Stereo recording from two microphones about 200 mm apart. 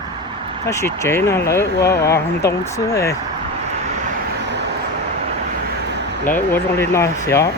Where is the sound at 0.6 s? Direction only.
15° left (ahead or behind).